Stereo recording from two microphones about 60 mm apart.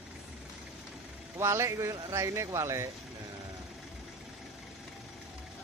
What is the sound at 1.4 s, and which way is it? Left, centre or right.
Speech, right.